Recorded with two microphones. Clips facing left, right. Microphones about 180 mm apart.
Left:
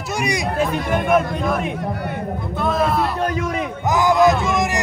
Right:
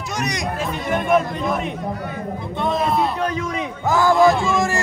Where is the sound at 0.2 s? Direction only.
10° left (ahead or behind).